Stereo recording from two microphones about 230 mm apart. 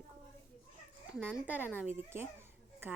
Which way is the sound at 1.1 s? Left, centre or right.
Centre.